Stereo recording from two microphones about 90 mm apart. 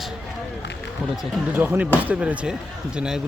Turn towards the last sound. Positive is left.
turn(degrees=-10)  # may be behind; listen again after turning